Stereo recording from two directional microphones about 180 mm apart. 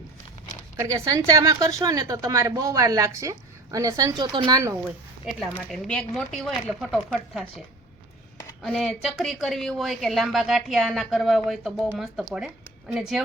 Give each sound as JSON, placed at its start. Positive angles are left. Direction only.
{"t": 0.9, "sound": "a woman's voice", "side_deg": -20}
{"t": 4.9, "sound": "a woman's voice", "side_deg": -5}
{"t": 8.6, "sound": "a woman's voice", "side_deg": 0}
{"t": 12.9, "sound": "a woman's voice", "side_deg": 0}